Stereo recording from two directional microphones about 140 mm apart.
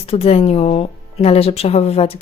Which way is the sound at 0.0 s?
45° left (ahead or behind).